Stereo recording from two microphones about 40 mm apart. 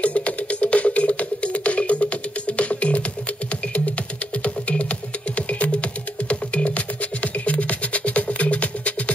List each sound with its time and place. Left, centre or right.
0.0 s music: left
4.4 s music: left